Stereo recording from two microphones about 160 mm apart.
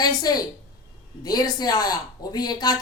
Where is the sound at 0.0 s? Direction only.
25° left (ahead or behind).